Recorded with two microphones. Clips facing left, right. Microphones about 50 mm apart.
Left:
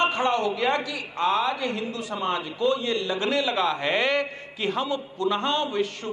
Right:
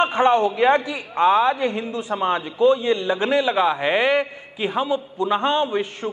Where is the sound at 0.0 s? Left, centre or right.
Right.